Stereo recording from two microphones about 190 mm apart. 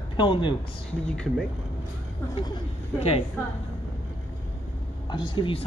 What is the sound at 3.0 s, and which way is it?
Speech, 30° left (ahead or behind).